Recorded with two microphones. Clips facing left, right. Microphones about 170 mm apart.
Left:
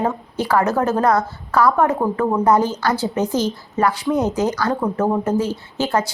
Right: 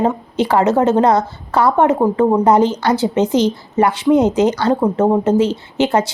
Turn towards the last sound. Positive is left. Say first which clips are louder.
# right 5 dB
turn(degrees=-20)  # may be behind; listen again after turning